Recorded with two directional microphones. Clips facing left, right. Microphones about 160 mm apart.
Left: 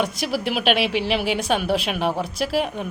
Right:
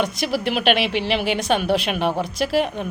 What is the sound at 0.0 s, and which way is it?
A woman's voice, 5° left (ahead or behind).